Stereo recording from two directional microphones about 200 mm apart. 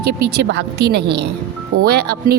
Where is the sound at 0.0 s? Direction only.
55° right (ahead or behind).